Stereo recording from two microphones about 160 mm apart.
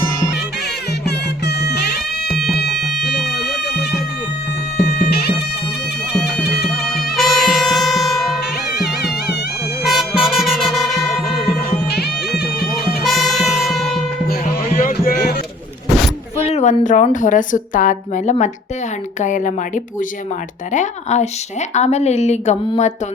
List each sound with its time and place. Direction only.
1.0 s music: 90° left
2.3 s music: centre (ahead or behind)
4.8 s music: 85° left
6.4 s music: 90° left
6.7 s music: centre (ahead or behind)
9.8 s music: centre (ahead or behind)
12.7 s music: centre (ahead or behind)
14.4 s music: 55° left (ahead or behind)
16.4 s a woman's voice: 45° left (ahead or behind)